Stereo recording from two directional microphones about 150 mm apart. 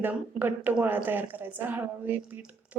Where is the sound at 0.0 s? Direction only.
15° right (ahead or behind).